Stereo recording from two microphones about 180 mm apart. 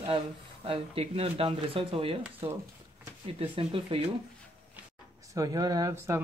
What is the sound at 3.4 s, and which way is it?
Speech, 30° right (ahead or behind).